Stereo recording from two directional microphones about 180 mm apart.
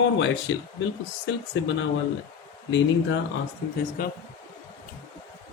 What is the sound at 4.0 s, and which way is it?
Speech, 50° left (ahead or behind).